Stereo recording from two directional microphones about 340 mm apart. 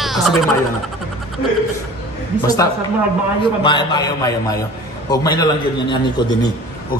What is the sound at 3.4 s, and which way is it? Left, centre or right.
Speech, centre.